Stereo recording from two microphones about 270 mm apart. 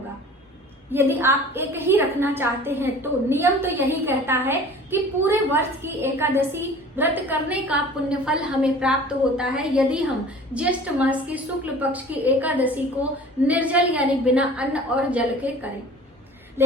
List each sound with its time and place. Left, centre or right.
0.9 s a woman's voice: centre
16.6 s a woman's voice: centre